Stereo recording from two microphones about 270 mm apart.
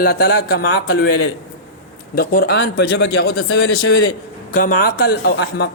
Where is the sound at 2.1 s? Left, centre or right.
Left.